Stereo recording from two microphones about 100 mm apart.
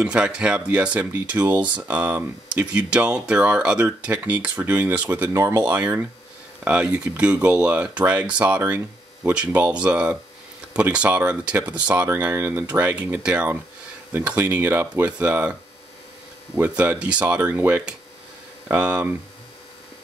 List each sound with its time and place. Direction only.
0.0 s speech: 10° right (ahead or behind)
5.3 s speech: 30° right (ahead or behind)
5.6 s speech: 20° right (ahead or behind)
16.5 s speech: 15° right (ahead or behind)